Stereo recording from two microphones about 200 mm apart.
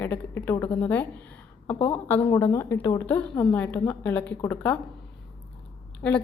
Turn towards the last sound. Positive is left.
turn(degrees=10)  # may be behind; listen again after turning